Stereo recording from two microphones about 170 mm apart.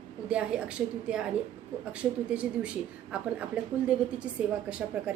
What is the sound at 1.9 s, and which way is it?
Speech, 5° right (ahead or behind).